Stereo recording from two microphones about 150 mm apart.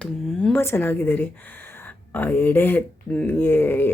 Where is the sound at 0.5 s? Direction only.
15° left (ahead or behind).